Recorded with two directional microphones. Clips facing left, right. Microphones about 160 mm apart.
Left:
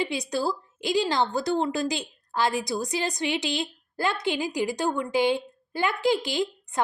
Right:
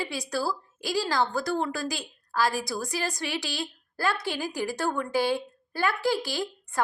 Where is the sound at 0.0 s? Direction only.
20° left (ahead or behind).